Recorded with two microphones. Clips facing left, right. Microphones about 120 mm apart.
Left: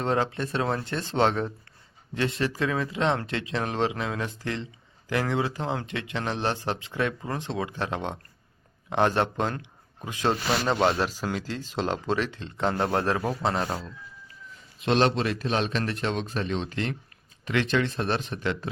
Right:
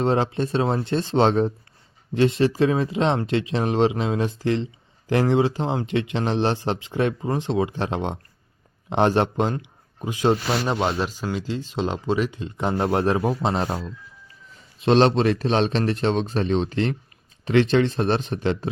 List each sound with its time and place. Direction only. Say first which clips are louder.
0.0 s a man's voice: right 5 dB; 20° right (ahead or behind)
10.8 s speech: even; 5° right (ahead or behind); by 18.7 s 25° right (ahead or behind)